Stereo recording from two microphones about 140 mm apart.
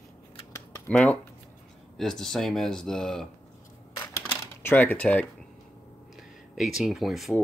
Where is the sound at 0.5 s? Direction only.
20° left (ahead or behind).